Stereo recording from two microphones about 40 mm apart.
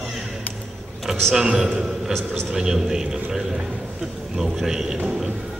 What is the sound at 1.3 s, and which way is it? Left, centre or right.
A man's voice, centre.